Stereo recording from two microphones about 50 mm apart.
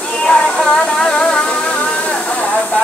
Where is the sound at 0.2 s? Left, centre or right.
Left.